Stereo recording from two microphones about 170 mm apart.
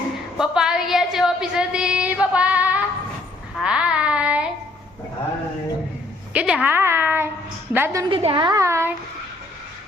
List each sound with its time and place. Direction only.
0.3 s a woman's voice: 5° right (ahead or behind)
6.3 s a woman's voice: 5° right (ahead or behind)
8.1 s a woman's voice: 30° right (ahead or behind); by 9.0 s 15° right (ahead or behind)